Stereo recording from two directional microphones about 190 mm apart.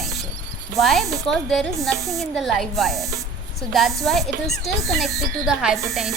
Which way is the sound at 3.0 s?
15° right (ahead or behind).